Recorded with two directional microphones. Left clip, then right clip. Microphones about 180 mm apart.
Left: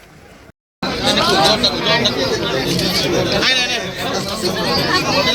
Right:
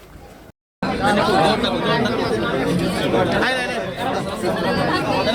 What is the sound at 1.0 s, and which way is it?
Chatter, 45° right (ahead or behind).